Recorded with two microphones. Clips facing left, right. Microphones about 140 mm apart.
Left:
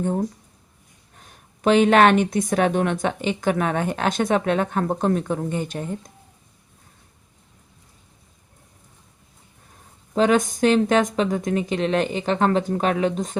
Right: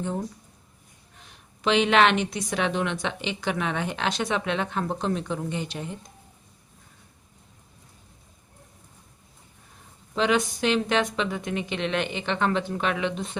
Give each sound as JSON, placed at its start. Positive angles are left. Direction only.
{"t": 0.0, "sound": "speech", "side_deg": 45}
{"t": 10.2, "sound": "speech", "side_deg": 45}